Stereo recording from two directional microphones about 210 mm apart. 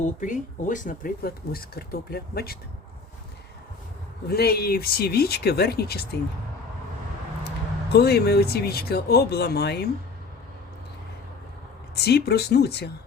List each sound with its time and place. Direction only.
0.2 s speech: 35° left (ahead or behind)
4.3 s speech: 50° left (ahead or behind)
7.9 s speech: 50° left (ahead or behind)
11.9 s speech: 50° left (ahead or behind)